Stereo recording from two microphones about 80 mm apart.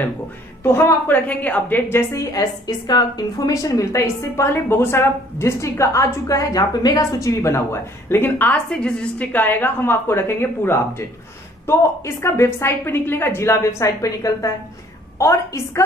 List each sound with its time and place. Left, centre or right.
0.7 s a woman's voice: left
1.1 s a woman's voice: centre
1.9 s a woman's voice: left
2.3 s a woman's voice: left
8.1 s a woman's voice: left
8.6 s a woman's voice: centre; by 11.1 s left
12.2 s a woman's voice: left